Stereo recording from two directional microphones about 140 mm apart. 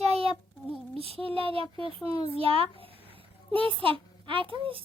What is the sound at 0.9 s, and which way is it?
A child's voice, 40° right (ahead or behind).